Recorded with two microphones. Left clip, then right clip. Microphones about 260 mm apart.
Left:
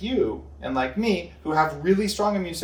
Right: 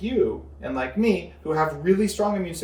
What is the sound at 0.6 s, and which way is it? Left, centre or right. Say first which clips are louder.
Speech: even; centre.